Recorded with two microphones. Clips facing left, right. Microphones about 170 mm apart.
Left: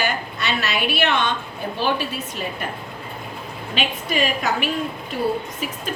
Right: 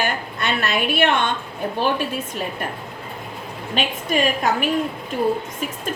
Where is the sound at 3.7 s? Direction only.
50° right (ahead or behind).